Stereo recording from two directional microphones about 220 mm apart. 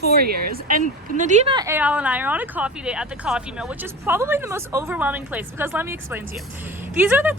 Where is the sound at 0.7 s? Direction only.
35° right (ahead or behind).